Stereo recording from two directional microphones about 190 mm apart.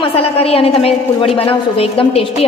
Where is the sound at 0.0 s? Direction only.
30° left (ahead or behind).